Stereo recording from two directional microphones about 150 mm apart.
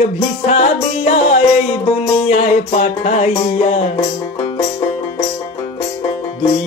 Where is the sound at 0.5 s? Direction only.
45° left (ahead or behind).